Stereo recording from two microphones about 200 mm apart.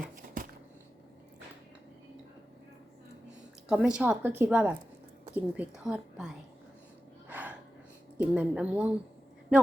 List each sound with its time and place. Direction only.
0.0 s a sound: 40° right (ahead or behind)
3.7 s a woman's voice: 5° right (ahead or behind)
7.3 s gasp: 10° right (ahead or behind)
8.3 s a woman's voice: 5° right (ahead or behind)